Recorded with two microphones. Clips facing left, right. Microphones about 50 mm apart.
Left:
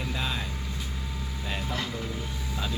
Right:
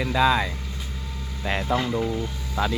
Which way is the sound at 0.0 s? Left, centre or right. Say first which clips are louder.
Right 12 dB; right.